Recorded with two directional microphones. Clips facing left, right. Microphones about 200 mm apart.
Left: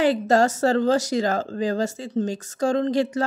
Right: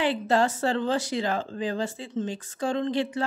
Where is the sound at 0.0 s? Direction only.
40° left (ahead or behind).